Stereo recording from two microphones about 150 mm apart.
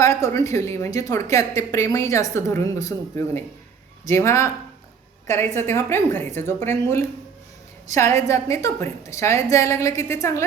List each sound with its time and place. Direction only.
0.0 s a woman's voice: 20° left (ahead or behind)
4.0 s a woman's voice: 20° left (ahead or behind)